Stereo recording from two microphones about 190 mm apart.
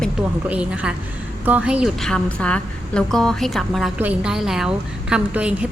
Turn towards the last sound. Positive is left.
turn(degrees=-5)  # may be behind; listen again after turning